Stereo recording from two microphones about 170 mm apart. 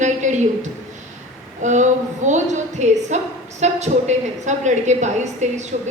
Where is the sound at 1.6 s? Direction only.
45° right (ahead or behind).